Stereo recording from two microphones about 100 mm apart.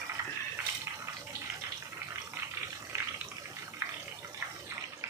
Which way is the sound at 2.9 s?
30° right (ahead or behind).